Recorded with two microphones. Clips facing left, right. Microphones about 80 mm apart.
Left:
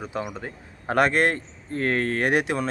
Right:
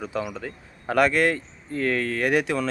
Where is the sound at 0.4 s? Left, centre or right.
Left.